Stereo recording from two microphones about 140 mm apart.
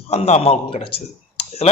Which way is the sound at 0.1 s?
50° left (ahead or behind).